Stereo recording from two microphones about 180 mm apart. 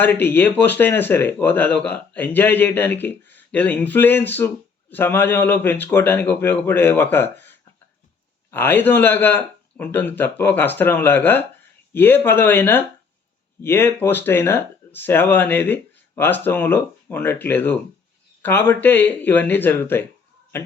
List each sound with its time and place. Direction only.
0.0 s speech: 10° left (ahead or behind)